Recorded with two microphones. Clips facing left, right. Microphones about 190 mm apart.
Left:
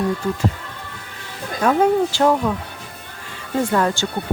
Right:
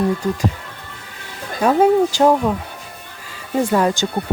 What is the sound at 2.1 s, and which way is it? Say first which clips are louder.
Speech: right 3 dB; 20° right (ahead or behind).